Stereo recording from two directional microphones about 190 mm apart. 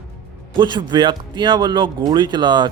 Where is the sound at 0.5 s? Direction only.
25° right (ahead or behind).